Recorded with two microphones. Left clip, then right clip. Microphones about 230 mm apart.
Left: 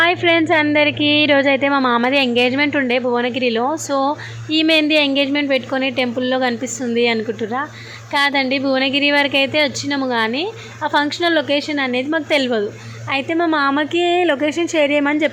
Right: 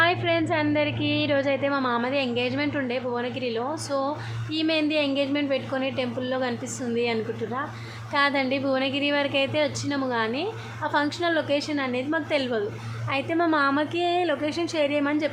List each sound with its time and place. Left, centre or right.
0.0 s a woman's voice: left